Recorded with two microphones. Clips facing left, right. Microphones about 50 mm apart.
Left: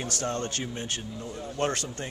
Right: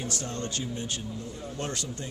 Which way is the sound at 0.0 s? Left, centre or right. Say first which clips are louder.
Left 3 dB; left.